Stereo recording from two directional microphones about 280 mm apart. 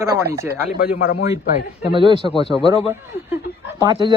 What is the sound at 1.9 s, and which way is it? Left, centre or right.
Speech, centre.